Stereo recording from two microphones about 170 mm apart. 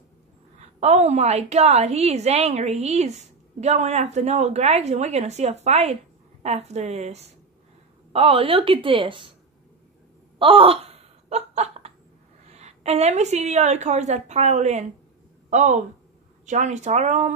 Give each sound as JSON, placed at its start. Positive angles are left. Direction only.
{"t": 0.6, "sound": "a woman's voice", "side_deg": -40}
{"t": 10.4, "sound": "wail", "side_deg": -30}
{"t": 12.4, "sound": "a woman's voice", "side_deg": -40}